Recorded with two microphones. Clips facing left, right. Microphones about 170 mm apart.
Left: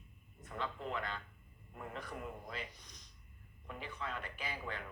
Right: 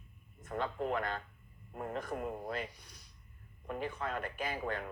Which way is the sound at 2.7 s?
10° right (ahead or behind).